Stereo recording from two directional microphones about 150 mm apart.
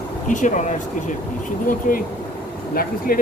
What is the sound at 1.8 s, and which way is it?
Speech, 60° left (ahead or behind).